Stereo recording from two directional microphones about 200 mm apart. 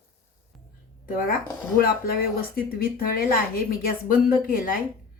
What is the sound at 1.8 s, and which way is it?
Speech, 45° left (ahead or behind).